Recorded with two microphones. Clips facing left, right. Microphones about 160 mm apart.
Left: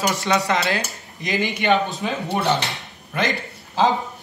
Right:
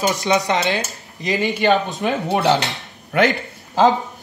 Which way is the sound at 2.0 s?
70° right (ahead or behind).